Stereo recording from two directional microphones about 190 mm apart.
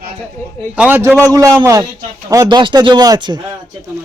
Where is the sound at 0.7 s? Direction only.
10° right (ahead or behind).